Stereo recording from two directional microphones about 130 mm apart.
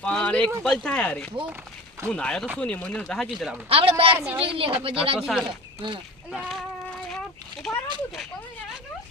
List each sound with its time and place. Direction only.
0.0 s speech: 10° left (ahead or behind)
3.7 s a woman's voice: 45° right (ahead or behind)
5.2 s speech: 5° right (ahead or behind)
5.5 s speech: 35° right (ahead or behind)
6.3 s speech: 5° right (ahead or behind)
7.1 s a sound: 5° left (ahead or behind)